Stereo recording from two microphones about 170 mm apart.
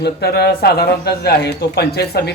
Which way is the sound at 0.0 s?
75° left (ahead or behind).